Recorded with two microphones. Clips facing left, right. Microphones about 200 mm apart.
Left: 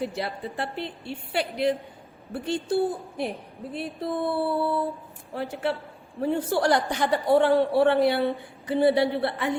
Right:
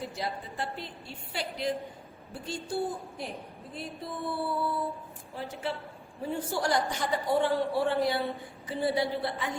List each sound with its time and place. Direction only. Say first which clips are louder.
0.0 s a woman's voice: left 6 dB; 65° left (ahead or behind)